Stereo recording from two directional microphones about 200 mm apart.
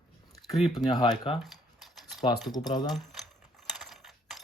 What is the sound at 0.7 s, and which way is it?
Speech, 20° left (ahead or behind).